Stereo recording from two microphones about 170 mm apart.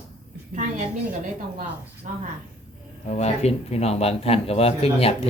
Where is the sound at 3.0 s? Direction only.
40° left (ahead or behind).